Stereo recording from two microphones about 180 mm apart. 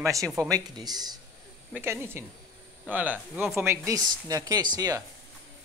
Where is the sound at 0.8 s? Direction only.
20° right (ahead or behind); by 3.7 s centre (ahead or behind).